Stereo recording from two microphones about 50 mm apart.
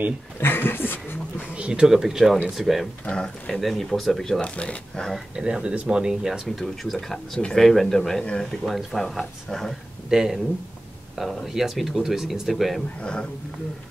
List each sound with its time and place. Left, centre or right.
0.4 s speech: left
1.5 s speech: centre
1.9 s speech: centre
3.1 s speech: centre
4.4 s speech: left
5.3 s speech: centre
6.5 s speech: centre
10.0 s speech: centre
13.0 s speech: centre